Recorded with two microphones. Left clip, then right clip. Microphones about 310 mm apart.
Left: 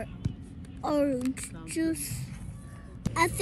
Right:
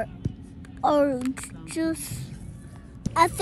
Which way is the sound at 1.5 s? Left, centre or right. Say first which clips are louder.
Right 3 dB; right.